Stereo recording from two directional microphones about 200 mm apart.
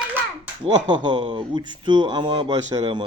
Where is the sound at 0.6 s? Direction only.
20° right (ahead or behind).